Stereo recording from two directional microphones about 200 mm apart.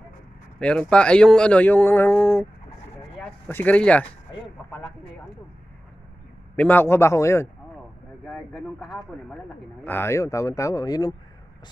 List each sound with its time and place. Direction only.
0.6 s speech: 5° left (ahead or behind)
6.5 s speech: 10° left (ahead or behind)
8.3 s speech: centre (ahead or behind)
9.8 s speech: 10° left (ahead or behind)